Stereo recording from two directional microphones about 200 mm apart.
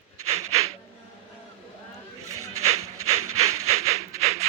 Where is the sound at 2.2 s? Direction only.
90° right.